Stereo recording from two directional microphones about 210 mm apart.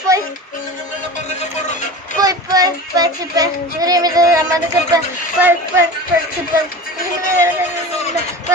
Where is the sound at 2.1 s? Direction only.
15° right (ahead or behind).